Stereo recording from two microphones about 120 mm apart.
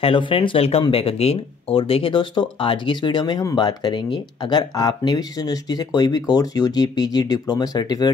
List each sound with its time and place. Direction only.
0.0 s speech: 45° left (ahead or behind)